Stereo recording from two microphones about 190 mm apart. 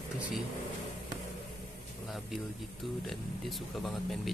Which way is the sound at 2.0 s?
Centre (ahead or behind).